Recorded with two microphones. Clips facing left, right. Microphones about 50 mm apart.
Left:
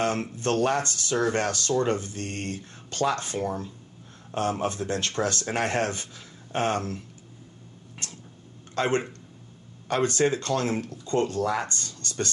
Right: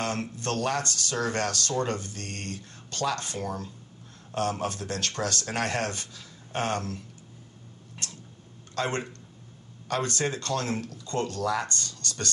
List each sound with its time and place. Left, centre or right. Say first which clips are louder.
0.0 s speech: left 4 dB; left
8.7 s speech: left 4 dB; left